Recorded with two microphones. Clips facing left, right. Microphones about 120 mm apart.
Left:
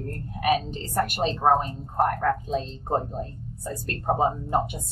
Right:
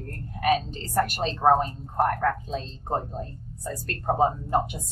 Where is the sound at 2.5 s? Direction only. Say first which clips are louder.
Left 3 dB; 15° left (ahead or behind).